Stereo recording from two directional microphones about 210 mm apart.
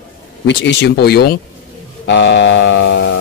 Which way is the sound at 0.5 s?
55° left (ahead or behind).